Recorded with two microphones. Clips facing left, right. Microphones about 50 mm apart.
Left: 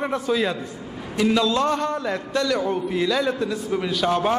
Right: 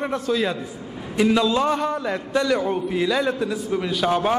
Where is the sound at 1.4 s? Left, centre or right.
Centre.